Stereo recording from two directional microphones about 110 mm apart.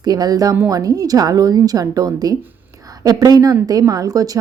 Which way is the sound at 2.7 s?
30° right (ahead or behind).